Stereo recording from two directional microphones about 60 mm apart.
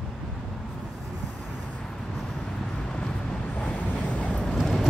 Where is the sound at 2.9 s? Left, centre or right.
Centre.